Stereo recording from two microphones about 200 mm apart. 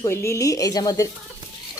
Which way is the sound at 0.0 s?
15° left (ahead or behind).